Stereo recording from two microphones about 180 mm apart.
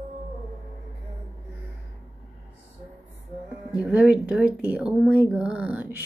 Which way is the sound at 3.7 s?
5° right (ahead or behind).